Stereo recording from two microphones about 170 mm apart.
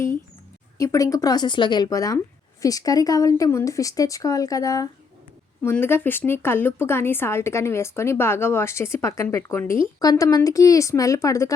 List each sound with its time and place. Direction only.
0.8 s a woman's voice: 20° left (ahead or behind)